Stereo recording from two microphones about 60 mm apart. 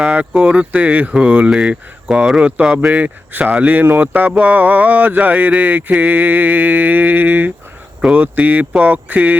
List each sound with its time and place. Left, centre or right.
0.0 s speech: centre